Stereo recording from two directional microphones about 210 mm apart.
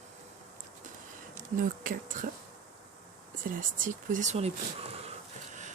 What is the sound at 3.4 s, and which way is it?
Speech, 40° right (ahead or behind).